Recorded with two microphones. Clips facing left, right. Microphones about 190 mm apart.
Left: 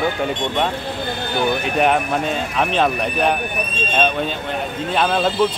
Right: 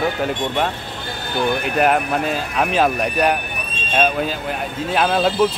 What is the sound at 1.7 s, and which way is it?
A man's voice, 5° right (ahead or behind).